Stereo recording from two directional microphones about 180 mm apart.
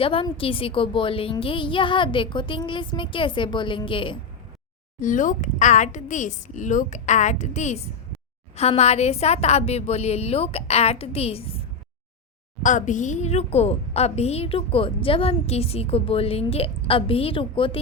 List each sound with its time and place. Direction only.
0.0 s a woman's voice: 30° left (ahead or behind)
4.9 s a woman's voice: 45° left (ahead or behind)
12.6 s a woman's voice: 45° left (ahead or behind); by 17.7 s 30° left (ahead or behind)